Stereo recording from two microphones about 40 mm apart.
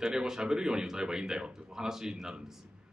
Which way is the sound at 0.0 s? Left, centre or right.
Centre.